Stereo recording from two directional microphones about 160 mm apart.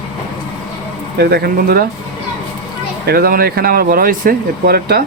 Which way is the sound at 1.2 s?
85° right.